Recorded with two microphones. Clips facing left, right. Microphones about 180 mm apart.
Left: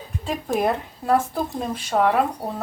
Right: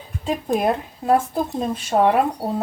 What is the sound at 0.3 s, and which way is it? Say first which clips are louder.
Speech: right 2 dB; 20° right (ahead or behind).